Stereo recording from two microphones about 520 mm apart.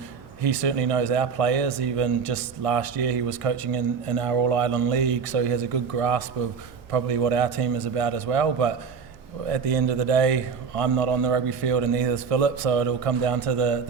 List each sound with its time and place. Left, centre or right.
0.4 s speech: right